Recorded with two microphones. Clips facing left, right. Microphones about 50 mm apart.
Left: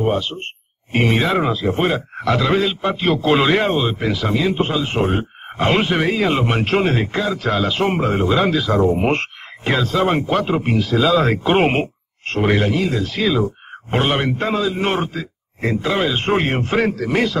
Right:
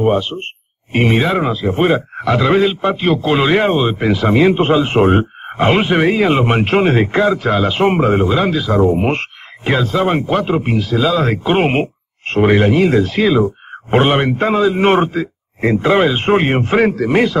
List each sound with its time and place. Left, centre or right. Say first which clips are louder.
0.0 s a man's voice: right 5 dB; centre
3.6 s speech: right 4 dB; right
5.6 s a man's voice: right 4 dB; centre
7.4 s speech: right 4 dB; centre
8.3 s speech: right 2 dB; centre
11.8 s a man's voice: right 4 dB; centre